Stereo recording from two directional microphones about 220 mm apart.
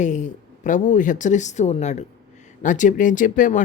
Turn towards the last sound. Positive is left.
turn(degrees=35)  # may be behind; listen again after turning